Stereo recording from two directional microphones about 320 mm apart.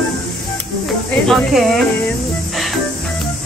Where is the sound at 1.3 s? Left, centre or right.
Centre.